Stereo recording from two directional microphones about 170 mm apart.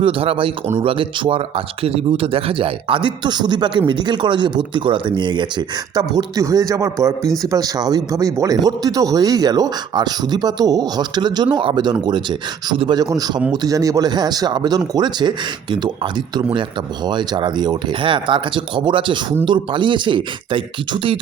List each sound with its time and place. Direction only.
0.0 s speech: 35° right (ahead or behind)